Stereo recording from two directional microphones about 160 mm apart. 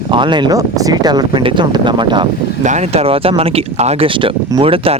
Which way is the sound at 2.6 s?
50° right (ahead or behind).